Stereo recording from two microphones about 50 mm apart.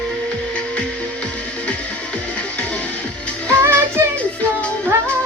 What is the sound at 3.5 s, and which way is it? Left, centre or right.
Music, right.